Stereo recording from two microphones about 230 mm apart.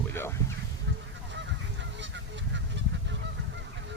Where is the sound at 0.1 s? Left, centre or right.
Centre.